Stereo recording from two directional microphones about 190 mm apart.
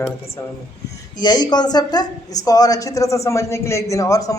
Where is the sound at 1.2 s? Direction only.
25° left (ahead or behind).